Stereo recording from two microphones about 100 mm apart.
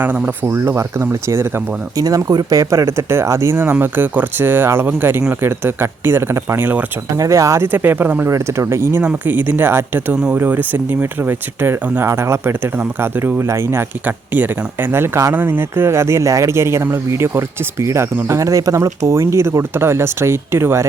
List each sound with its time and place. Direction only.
0.0 s speech: 20° right (ahead or behind)
2.0 s speech: 35° right (ahead or behind); by 6.8 s 20° right (ahead or behind)
7.2 s speech: 35° right (ahead or behind)